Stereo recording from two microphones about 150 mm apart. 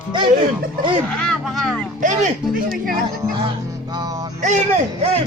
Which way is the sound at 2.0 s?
60° right (ahead or behind).